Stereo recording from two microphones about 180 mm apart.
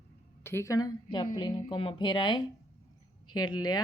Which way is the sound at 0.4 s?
15° left (ahead or behind).